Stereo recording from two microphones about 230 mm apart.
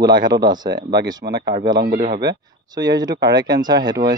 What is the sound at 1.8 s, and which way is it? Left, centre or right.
Speech, right.